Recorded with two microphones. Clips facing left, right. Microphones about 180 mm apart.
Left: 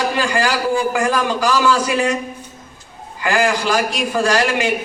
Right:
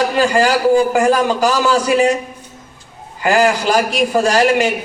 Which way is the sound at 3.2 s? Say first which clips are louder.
Right 4 dB; 40° right (ahead or behind).